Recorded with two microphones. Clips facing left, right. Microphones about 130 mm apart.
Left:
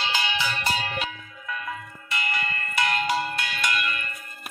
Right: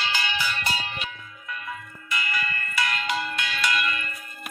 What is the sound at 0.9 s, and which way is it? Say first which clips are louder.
Church bell: left 4 dB; 90° left.